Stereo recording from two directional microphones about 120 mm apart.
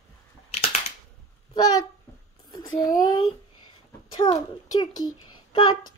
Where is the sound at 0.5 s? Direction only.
60° left (ahead or behind).